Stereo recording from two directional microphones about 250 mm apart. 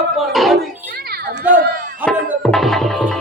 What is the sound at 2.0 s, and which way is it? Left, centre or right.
A man's voice, centre.